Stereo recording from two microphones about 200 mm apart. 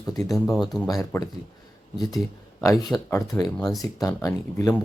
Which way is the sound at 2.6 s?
15° left (ahead or behind).